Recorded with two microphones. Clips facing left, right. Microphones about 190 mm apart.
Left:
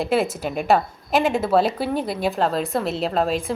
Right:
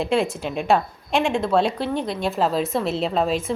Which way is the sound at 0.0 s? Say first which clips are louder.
Even; centre (ahead or behind).